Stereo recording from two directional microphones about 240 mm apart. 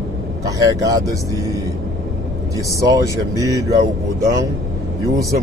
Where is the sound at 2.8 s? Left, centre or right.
Centre.